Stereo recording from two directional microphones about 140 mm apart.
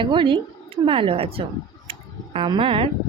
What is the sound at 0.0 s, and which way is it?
Speech, 35° right (ahead or behind).